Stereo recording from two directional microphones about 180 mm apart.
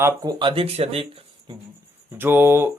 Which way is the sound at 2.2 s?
10° right (ahead or behind).